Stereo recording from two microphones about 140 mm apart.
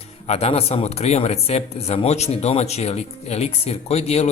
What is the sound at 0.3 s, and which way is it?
A man's voice, 50° left (ahead or behind).